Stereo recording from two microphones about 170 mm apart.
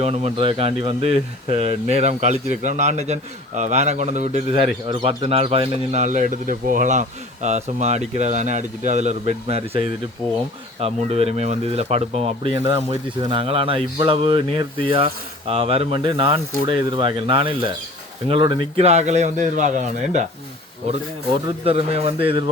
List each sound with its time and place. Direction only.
0.0 s speech: 35° right (ahead or behind)
4.9 s speech: 30° right (ahead or behind)
12.5 s speech: 15° right (ahead or behind)
12.9 s speech: 35° right (ahead or behind)
21.6 s speech: 35° right (ahead or behind)